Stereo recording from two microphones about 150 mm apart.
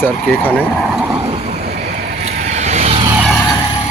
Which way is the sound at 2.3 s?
50° right (ahead or behind).